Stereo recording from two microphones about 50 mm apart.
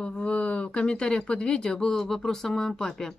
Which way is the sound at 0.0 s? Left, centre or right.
Left.